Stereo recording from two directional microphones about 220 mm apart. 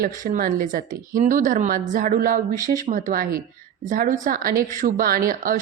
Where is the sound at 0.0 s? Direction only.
40° right (ahead or behind).